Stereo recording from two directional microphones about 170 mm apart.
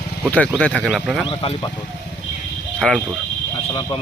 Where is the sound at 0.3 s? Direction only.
5° left (ahead or behind).